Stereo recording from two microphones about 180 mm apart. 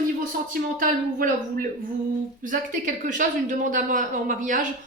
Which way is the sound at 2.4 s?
45° right (ahead or behind).